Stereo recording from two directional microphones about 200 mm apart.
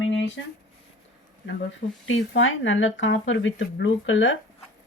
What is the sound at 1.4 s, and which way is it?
Speech, 65° left (ahead or behind).